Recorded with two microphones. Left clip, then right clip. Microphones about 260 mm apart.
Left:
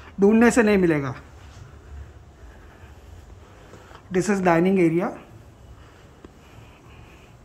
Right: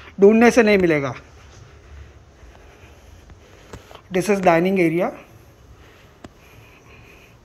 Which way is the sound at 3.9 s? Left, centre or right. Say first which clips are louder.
Right 3 dB; centre.